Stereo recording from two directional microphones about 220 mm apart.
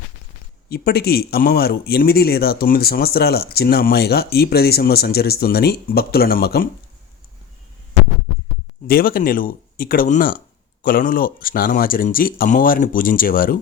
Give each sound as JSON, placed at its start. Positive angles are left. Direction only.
{"t": 0.7, "sound": "speech", "side_deg": 45}
{"t": 8.9, "sound": "speech", "side_deg": 40}